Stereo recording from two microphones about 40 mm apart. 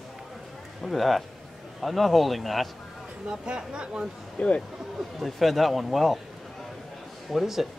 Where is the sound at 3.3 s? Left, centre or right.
Right.